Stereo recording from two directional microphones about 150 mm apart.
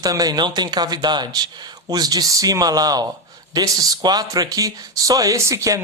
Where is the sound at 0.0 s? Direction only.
25° right (ahead or behind).